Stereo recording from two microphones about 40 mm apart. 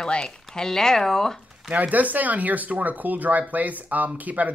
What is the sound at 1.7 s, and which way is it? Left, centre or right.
Speech, right.